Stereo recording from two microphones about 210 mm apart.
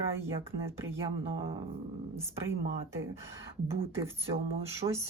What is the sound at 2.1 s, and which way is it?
Speech, 10° right (ahead or behind).